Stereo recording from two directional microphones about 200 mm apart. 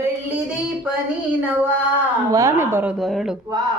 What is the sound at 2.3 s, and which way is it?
Speech, 15° right (ahead or behind).